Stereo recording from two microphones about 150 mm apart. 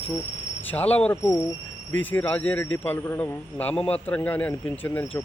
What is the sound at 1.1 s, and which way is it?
Speech, 20° left (ahead or behind).